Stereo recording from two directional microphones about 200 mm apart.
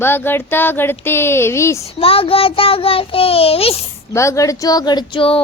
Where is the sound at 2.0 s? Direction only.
30° left (ahead or behind).